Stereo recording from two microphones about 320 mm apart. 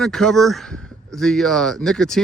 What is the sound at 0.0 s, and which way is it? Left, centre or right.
Speech, centre.